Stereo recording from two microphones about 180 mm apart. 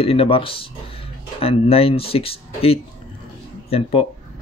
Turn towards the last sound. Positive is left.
turn(degrees=30)  # may be behind; listen again after turning